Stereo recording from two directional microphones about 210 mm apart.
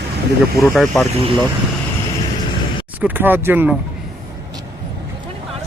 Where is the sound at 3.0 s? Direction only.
10° right (ahead or behind).